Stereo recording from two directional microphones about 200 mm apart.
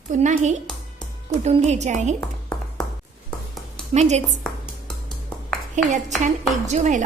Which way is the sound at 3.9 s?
35° right (ahead or behind).